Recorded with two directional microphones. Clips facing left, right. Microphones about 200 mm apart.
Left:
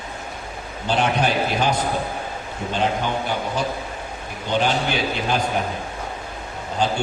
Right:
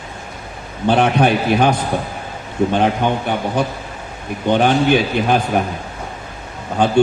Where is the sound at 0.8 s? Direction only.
60° right (ahead or behind).